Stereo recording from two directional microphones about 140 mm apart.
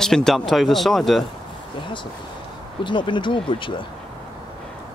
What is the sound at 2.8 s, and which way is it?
Speech, 35° left (ahead or behind).